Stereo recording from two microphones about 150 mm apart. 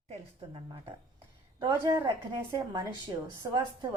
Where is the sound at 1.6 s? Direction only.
25° right (ahead or behind).